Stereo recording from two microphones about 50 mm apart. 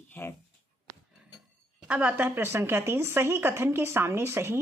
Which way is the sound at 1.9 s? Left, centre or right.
Right.